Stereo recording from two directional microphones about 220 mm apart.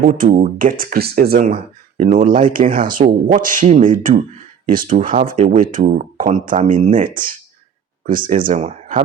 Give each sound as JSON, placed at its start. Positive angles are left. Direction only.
{"t": 0.0, "sound": "speech", "side_deg": -40}